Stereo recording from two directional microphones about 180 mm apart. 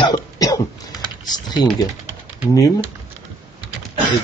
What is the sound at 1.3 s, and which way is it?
Typing, 25° left (ahead or behind).